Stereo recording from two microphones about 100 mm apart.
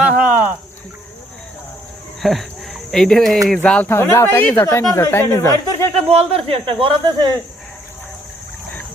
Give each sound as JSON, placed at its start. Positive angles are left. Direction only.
{"t": 0.2, "sound": "a sound", "side_deg": -15}
{"t": 2.2, "sound": "speech", "side_deg": 0}
{"t": 4.5, "sound": "speech", "side_deg": 35}
{"t": 6.1, "sound": "speech", "side_deg": -85}